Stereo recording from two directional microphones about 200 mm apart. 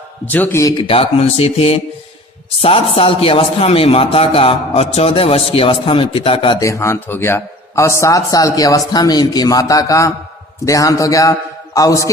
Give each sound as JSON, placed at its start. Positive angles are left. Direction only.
{"t": 0.3, "sound": "a man's voice", "side_deg": 10}
{"t": 0.9, "sound": "a man's voice", "side_deg": 30}
{"t": 6.6, "sound": "a man's voice", "side_deg": 15}